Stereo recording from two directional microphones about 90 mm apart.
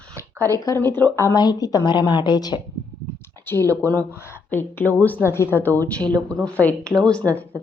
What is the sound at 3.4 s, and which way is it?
A woman's voice, 25° left (ahead or behind).